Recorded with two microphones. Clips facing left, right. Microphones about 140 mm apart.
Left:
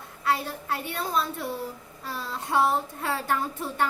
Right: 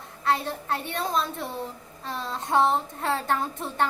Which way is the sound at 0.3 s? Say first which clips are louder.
Right 1 dB; 30° right (ahead or behind).